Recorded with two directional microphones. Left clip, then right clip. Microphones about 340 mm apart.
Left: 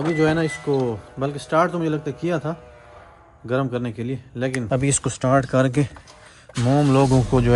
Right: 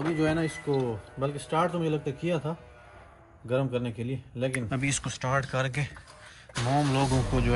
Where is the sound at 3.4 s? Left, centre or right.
Left.